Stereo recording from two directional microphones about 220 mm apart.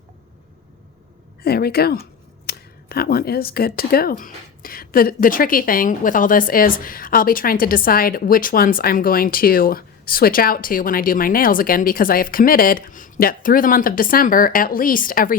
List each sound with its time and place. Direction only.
1.4 s a woman's voice: 45° left (ahead or behind)